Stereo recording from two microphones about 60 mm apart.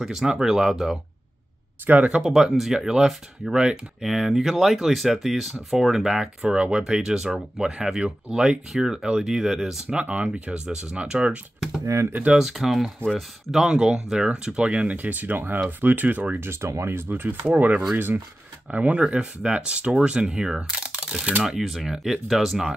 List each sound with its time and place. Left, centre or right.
0.0 s speech: centre
1.9 s speech: right
2.1 s speech: centre
9.8 s speech: right
11.8 s speech: right
12.4 s speech: centre
15.0 s speech: right
16.3 s speech: right; by 21.1 s centre
21.5 s speech: centre